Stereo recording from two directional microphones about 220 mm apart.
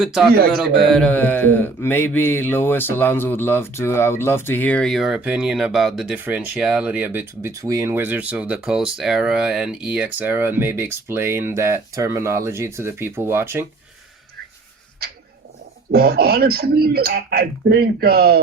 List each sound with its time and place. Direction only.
0.0 s speech: centre (ahead or behind)
15.9 s speech: 45° right (ahead or behind)